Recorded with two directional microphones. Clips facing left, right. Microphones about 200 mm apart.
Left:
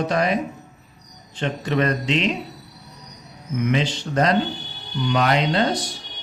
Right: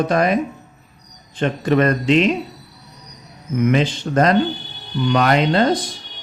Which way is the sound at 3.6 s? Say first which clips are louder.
Right 5 dB; 50° right (ahead or behind).